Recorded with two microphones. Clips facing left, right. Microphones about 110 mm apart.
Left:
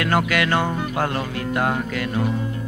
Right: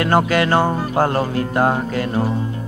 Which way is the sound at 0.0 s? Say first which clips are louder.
Right 4 dB; 30° right (ahead or behind).